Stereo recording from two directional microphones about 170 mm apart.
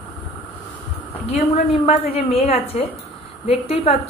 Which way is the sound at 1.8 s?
35° left (ahead or behind).